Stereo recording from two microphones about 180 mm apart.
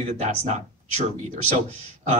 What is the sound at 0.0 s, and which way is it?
Speech, 40° right (ahead or behind).